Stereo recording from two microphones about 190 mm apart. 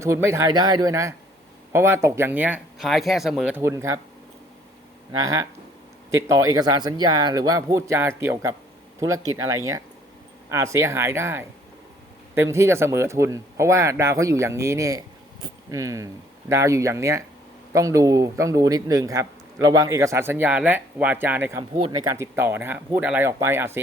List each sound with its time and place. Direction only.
0.0 s a man's voice: 15° right (ahead or behind)
5.2 s a man's voice: 20° right (ahead or behind)
21.8 s a man's voice: 25° right (ahead or behind)